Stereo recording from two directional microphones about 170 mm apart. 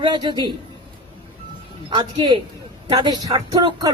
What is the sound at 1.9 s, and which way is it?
Speech, 25° right (ahead or behind).